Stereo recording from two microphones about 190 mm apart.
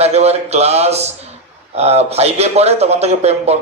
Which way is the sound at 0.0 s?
35° right (ahead or behind).